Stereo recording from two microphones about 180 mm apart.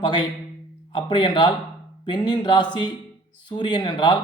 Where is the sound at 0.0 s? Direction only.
25° left (ahead or behind).